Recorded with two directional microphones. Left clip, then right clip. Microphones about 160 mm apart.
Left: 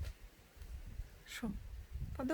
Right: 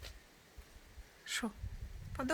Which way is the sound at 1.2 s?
10° right (ahead or behind).